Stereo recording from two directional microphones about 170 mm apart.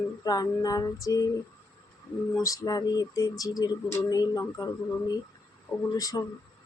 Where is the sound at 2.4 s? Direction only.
20° left (ahead or behind).